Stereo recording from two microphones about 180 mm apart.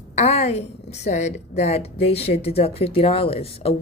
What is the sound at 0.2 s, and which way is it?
A woman's voice, 35° left (ahead or behind).